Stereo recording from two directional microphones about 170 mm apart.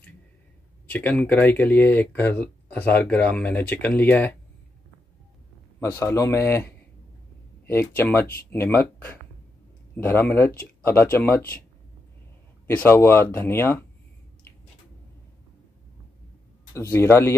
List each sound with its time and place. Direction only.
0.8 s speech: 10° left (ahead or behind)
5.8 s speech: 15° left (ahead or behind)
12.6 s speech: 15° left (ahead or behind)
16.7 s speech: 15° left (ahead or behind)